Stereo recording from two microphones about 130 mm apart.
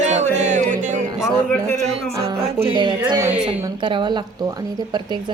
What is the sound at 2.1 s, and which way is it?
Speech, 20° right (ahead or behind).